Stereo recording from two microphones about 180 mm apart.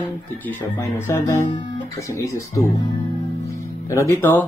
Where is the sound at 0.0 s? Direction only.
10° left (ahead or behind).